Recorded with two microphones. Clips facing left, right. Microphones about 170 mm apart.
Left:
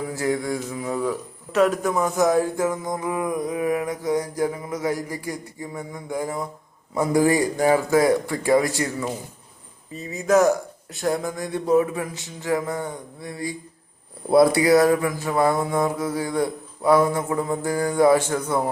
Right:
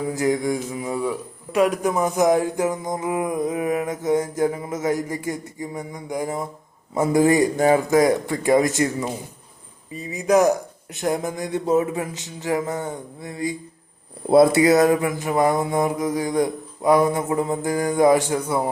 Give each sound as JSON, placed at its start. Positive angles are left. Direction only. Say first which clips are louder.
{"t": 0.1, "sound": "speech", "louder": "right 4 dB", "side_deg": -20}